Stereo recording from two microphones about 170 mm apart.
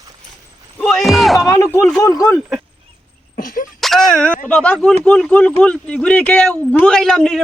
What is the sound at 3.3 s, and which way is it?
Cough, 55° left (ahead or behind).